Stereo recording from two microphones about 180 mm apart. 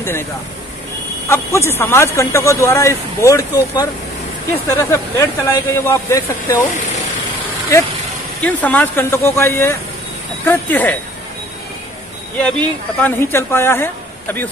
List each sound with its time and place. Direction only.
1.3 s speech: 15° left (ahead or behind)
4.6 s speech: 15° left (ahead or behind)
8.4 s speech: 10° left (ahead or behind)
12.4 s speech: 5° left (ahead or behind)